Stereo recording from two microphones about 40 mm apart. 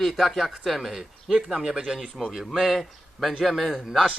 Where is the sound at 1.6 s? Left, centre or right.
Right.